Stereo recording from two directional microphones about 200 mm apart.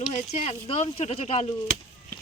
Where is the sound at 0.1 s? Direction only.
30° left (ahead or behind).